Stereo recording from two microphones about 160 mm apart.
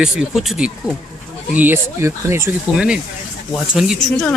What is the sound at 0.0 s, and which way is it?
Speech, 5° right (ahead or behind).